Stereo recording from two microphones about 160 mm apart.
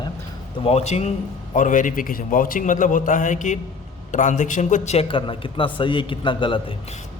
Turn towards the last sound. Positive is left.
turn(degrees=30)  # may be behind; listen again after turning